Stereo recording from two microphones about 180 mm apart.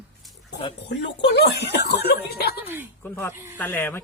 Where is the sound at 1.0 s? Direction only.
70° left (ahead or behind).